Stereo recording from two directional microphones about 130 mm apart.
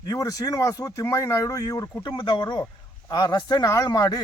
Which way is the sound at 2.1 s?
35° left (ahead or behind).